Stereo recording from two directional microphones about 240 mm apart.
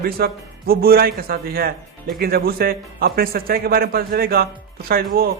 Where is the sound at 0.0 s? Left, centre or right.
Right.